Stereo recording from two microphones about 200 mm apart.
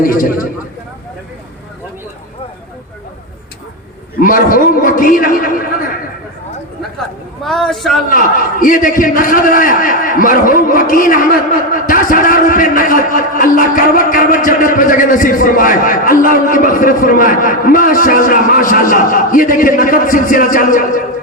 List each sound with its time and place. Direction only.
0.0 s a man's voice: 45° left (ahead or behind)
4.2 s a man's voice: 45° left (ahead or behind)
7.4 s a man's voice: centre (ahead or behind)
8.1 s a man's voice: 45° left (ahead or behind)